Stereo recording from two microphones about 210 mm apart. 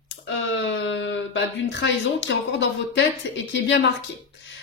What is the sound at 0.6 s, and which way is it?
Speech, 60° left (ahead or behind).